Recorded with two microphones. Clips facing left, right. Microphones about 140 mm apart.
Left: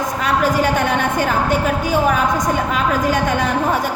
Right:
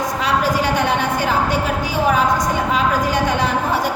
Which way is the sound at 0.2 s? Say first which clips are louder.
Left 2 dB; 50° left (ahead or behind).